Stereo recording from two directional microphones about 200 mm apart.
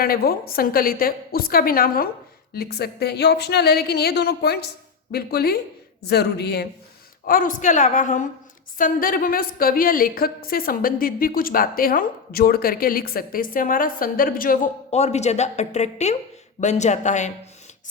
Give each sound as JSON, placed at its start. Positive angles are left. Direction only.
{"t": 0.0, "sound": "a woman's voice", "side_deg": 50}
{"t": 7.3, "sound": "a woman's voice", "side_deg": 45}